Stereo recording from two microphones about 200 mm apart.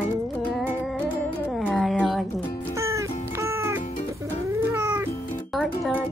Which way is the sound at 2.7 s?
15° right (ahead or behind).